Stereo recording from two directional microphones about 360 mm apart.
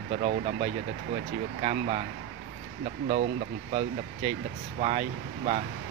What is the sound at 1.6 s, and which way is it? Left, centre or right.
Speech, centre.